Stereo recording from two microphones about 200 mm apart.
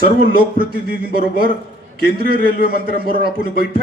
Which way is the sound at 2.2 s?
50° right (ahead or behind).